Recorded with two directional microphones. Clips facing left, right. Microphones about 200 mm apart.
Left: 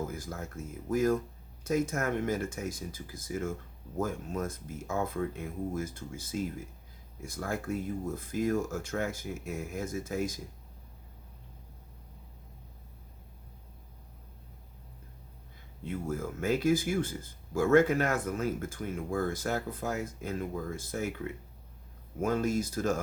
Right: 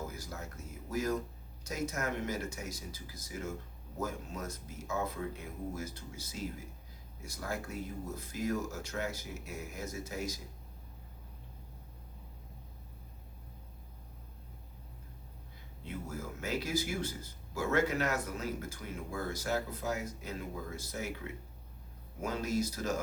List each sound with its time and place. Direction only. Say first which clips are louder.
0.1 s speech: left 5 dB; 50° left (ahead or behind)
15.9 s speech: left 7 dB; 50° left (ahead or behind)
22.2 s speech: left 5 dB; 50° left (ahead or behind)